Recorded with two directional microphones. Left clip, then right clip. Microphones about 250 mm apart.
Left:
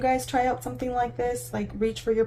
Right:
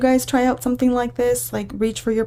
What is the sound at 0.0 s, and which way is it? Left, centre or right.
Speech, right.